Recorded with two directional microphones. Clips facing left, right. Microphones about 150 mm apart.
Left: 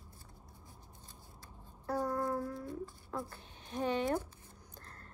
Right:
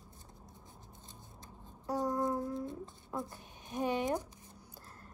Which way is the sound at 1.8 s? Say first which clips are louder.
Right 1 dB; 15° right (ahead or behind).